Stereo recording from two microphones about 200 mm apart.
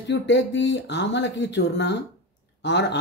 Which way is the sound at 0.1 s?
65° left (ahead or behind).